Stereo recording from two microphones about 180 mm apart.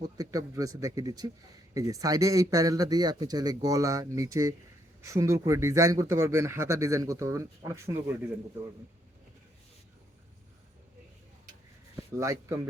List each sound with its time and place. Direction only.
0.0 s speech: 20° right (ahead or behind)
11.9 s speech: 15° right (ahead or behind)